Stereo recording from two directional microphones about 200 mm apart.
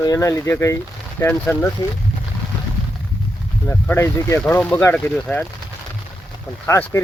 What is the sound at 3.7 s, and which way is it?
Speech, 10° left (ahead or behind).